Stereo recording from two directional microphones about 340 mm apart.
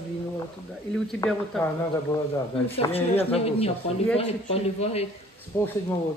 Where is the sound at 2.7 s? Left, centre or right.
Centre.